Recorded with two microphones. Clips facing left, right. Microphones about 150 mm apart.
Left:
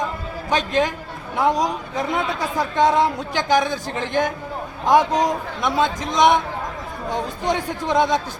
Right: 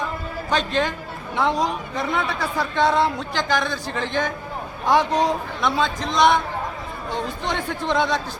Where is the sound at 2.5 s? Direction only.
15° left (ahead or behind).